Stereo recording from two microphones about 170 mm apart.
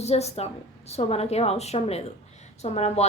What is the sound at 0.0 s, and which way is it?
A woman's voice, 40° left (ahead or behind).